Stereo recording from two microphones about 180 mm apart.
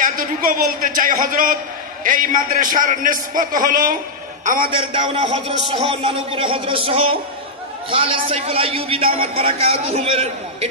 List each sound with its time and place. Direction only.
0.0 s a man's voice: 45° right (ahead or behind)
4.6 s a man's voice: 30° right (ahead or behind)